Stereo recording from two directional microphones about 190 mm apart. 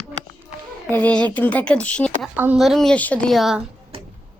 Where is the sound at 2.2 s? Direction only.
5° right (ahead or behind).